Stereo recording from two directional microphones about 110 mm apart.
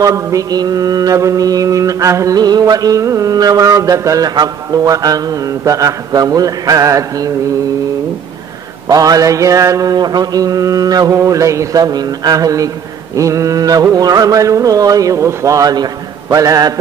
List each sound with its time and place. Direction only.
0.0 s mantra: 30° right (ahead or behind)
8.8 s mantra: 35° right (ahead or behind)